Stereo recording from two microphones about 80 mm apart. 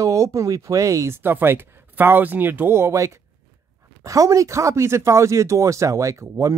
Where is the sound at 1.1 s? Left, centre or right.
Right.